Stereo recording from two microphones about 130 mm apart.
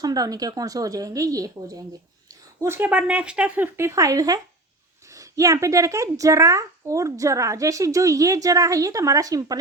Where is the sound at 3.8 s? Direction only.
25° right (ahead or behind).